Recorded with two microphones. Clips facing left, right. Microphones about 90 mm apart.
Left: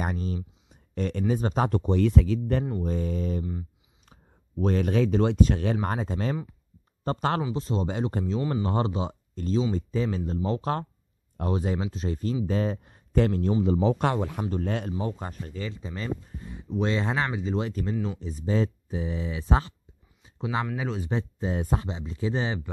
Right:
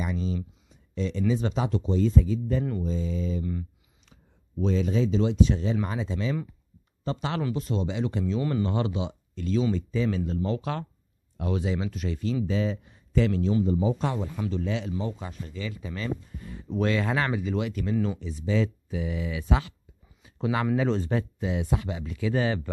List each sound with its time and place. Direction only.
0.0 s speech: 50° left (ahead or behind)
7.5 s speech: 30° left (ahead or behind)
7.8 s a man's voice: 45° left (ahead or behind)
13.7 s speech: 85° left; by 14.4 s 65° left (ahead or behind)
14.5 s speech: 50° left (ahead or behind)
15.7 s speech: 25° left (ahead or behind)
20.7 s speech: 10° left (ahead or behind)
21.1 s speech: 25° left (ahead or behind)
21.5 s speech: 40° left (ahead or behind)
21.8 s speech: 25° left (ahead or behind)